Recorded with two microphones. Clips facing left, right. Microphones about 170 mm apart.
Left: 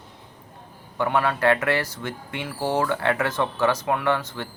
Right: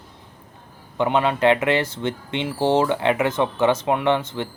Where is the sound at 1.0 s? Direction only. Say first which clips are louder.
Right 3 dB; 20° right (ahead or behind).